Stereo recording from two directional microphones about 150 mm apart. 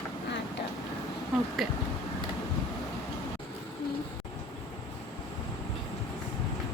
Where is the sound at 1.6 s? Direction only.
Centre (ahead or behind).